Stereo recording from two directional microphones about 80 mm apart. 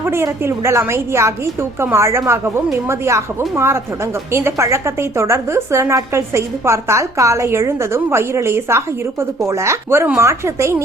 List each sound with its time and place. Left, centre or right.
0.0 s a woman's voice: right